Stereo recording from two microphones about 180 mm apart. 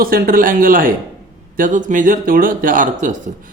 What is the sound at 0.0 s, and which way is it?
A man's voice, 55° right (ahead or behind).